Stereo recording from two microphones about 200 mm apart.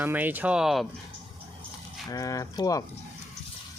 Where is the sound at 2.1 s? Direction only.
15° left (ahead or behind).